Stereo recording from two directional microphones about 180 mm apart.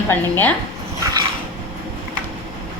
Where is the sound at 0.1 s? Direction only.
10° left (ahead or behind).